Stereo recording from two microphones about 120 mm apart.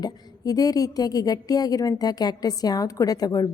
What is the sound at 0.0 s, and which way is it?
A woman's voice, 30° left (ahead or behind).